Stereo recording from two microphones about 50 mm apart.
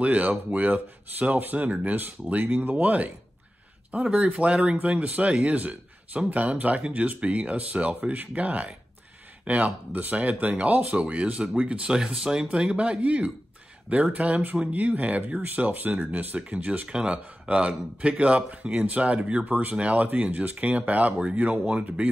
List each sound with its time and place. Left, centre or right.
0.0 s speech: right
2.7 s speech: right
15.4 s speech: right
16.3 s speech: right
19.4 s speech: right